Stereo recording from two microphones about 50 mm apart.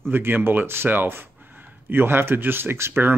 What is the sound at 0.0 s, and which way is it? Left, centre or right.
Speech, right.